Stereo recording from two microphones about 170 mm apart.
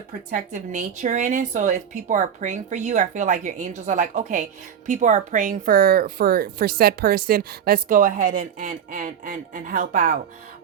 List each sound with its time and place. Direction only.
0.3 s speech: 50° right (ahead or behind)